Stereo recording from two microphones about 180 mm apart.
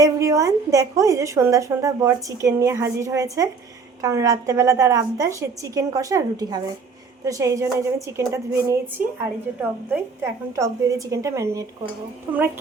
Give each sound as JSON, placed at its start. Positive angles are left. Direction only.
{"t": 0.0, "sound": "a woman's voice", "side_deg": -20}